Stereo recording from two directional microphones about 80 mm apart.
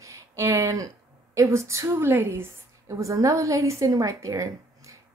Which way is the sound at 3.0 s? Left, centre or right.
Right.